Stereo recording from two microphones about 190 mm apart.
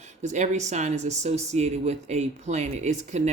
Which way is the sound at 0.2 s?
40° right (ahead or behind).